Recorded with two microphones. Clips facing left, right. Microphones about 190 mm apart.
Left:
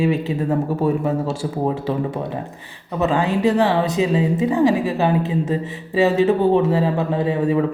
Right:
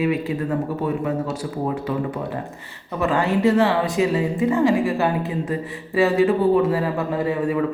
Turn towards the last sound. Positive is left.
turn(degrees=25)  # may be behind; listen again after turning